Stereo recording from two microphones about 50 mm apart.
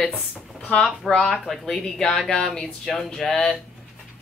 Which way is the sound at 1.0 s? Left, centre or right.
Centre.